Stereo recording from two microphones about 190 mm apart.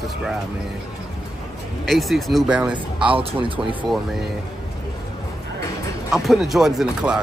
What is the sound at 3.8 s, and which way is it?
Speech, centre (ahead or behind).